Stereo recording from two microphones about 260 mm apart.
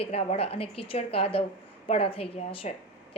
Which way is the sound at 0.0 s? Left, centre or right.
Left.